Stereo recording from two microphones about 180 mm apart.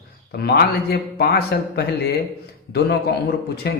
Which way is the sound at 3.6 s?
65° left (ahead or behind).